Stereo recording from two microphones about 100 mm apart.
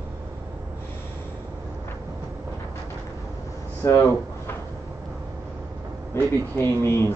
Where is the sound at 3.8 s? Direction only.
30° left (ahead or behind).